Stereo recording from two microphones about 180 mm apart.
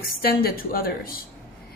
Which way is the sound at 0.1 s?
55° left (ahead or behind).